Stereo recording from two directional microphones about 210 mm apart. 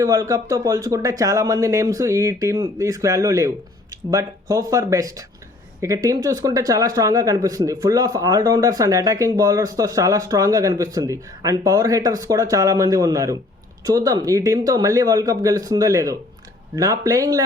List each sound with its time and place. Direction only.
0.0 s speech: 15° right (ahead or behind)